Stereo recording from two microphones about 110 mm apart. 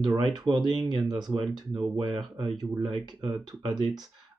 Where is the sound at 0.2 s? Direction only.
40° right (ahead or behind).